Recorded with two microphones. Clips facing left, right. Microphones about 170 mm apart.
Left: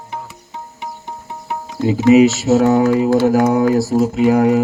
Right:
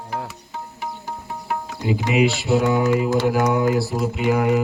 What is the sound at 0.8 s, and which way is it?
Music, 20° left (ahead or behind).